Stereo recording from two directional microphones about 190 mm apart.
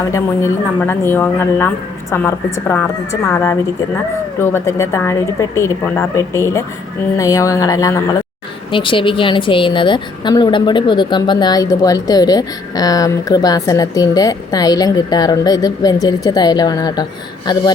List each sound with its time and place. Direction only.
0.0 s a woman's voice: 15° left (ahead or behind)